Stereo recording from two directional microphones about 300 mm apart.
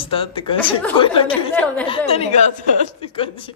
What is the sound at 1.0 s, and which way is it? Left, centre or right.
Speech, centre.